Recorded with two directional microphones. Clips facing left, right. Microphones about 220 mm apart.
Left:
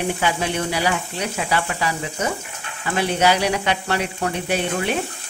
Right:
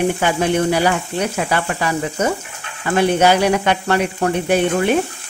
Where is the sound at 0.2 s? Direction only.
50° right (ahead or behind).